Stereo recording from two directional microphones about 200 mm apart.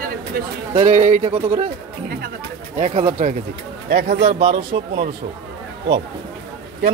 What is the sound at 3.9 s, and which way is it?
Speech, 55° right (ahead or behind).